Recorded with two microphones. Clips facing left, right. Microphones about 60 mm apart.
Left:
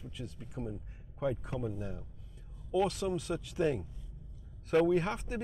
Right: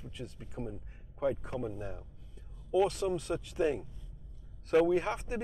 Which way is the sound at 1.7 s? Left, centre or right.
Right.